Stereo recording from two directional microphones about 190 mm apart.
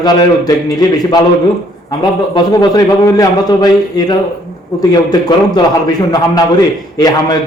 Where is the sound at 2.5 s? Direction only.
20° left (ahead or behind).